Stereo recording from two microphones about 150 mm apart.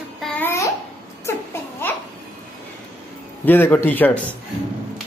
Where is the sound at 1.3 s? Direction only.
15° left (ahead or behind).